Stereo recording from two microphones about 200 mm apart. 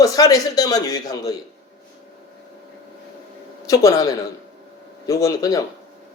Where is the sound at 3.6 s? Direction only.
15° left (ahead or behind).